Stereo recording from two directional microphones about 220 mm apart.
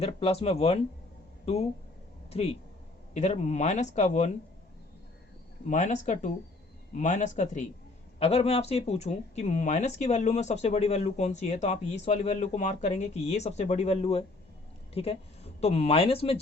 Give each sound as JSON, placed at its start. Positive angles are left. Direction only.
{"t": 0.0, "sound": "speech", "side_deg": 25}
{"t": 2.3, "sound": "speech", "side_deg": 30}
{"t": 5.6, "sound": "a woman's voice", "side_deg": 35}